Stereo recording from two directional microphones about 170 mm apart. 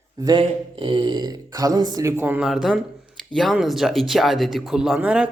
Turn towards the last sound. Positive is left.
turn(degrees=-5)  # may be behind; listen again after turning